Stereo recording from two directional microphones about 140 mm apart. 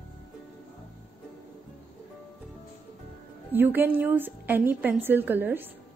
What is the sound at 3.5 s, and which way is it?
A woman's voice, 15° right (ahead or behind).